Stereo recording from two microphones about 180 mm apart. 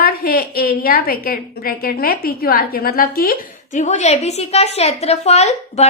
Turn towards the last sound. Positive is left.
turn(degrees=40)  # may be behind; listen again after turning